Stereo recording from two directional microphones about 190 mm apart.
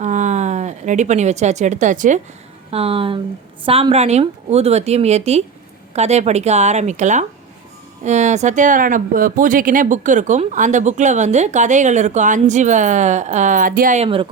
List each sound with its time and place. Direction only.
0.0 s speech: 40° right (ahead or behind)
2.6 s speech: 30° right (ahead or behind)